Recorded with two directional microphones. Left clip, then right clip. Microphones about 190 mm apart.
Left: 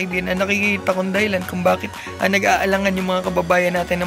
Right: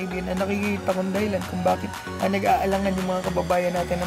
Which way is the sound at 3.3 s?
15° left (ahead or behind).